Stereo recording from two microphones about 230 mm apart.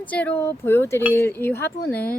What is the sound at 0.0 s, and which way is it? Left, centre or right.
Speech, centre.